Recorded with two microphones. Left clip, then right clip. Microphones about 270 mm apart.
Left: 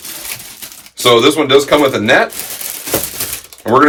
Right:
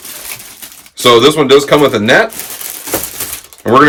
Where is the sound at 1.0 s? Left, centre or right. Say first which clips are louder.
Right 3 dB; right.